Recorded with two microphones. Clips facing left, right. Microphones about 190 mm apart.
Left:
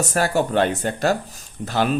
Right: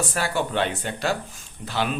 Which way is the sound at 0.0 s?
45° left (ahead or behind).